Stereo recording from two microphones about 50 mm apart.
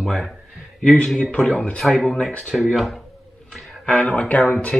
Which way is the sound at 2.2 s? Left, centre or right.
Centre.